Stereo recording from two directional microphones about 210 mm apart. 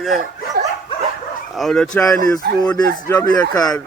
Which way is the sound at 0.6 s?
45° right (ahead or behind).